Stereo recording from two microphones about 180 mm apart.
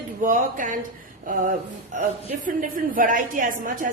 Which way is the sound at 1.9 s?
45° right (ahead or behind).